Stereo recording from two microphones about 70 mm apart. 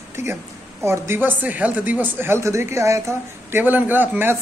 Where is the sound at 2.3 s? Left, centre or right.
Right.